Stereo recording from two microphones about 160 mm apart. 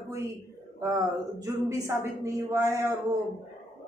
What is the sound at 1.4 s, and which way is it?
A woman's voice, 20° right (ahead or behind).